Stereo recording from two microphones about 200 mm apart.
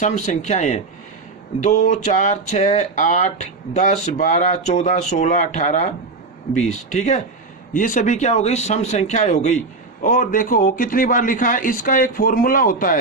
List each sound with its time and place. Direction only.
0.0 s a man's voice: 35° left (ahead or behind)